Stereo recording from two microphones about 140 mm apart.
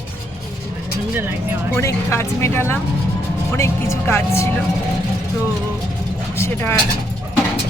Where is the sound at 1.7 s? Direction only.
20° left (ahead or behind).